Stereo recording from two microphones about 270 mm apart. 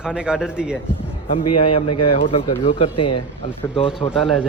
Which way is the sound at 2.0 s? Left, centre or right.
Centre.